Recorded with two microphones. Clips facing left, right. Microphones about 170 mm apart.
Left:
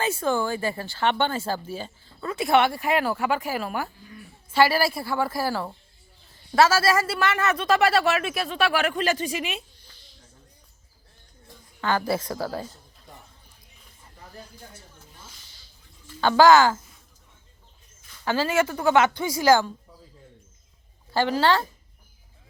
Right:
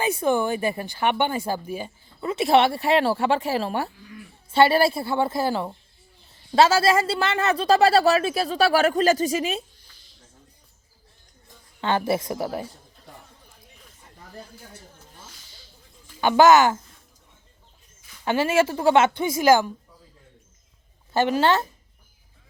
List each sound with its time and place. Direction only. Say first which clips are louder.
0.0 s a man's voice: right 3 dB; 20° right (ahead or behind); by 9.6 s 40° right (ahead or behind)
11.8 s speech: right 2 dB; 25° right (ahead or behind)
16.0 s speech: right 1 dB; 15° right (ahead or behind)
18.3 s speech: right 3 dB; 25° right (ahead or behind)
21.1 s speech: right 1 dB; 20° right (ahead or behind)